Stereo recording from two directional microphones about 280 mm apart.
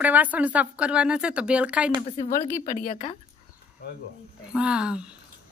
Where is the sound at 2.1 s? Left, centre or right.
Left.